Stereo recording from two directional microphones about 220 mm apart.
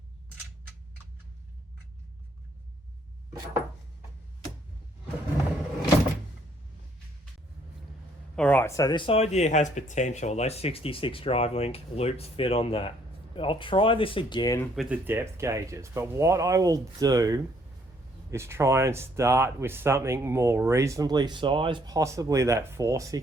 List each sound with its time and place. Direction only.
8.4 s speech: 5° left (ahead or behind)
14.8 s speech: 5° right (ahead or behind)